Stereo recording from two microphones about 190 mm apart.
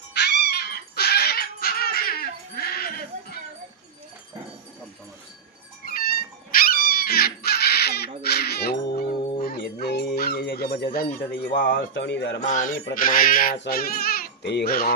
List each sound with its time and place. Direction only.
0.1 s dog: 55° left (ahead or behind)
6.5 s crow: 50° left (ahead or behind)
9.8 s dog: 55° left (ahead or behind)
10.9 s speech: 50° left (ahead or behind)
12.0 s speech: 70° left (ahead or behind)
12.4 s music: 40° left (ahead or behind)
12.8 s speech: 45° left (ahead or behind)